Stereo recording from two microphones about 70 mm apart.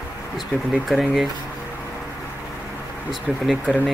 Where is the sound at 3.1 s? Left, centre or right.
Centre.